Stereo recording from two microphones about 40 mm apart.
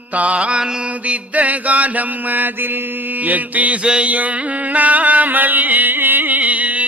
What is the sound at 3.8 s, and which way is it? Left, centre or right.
Mantra, right.